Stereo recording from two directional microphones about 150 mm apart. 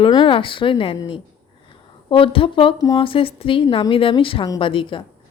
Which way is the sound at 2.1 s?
35° left (ahead or behind).